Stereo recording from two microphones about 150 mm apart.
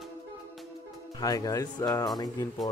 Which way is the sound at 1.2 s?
25° left (ahead or behind).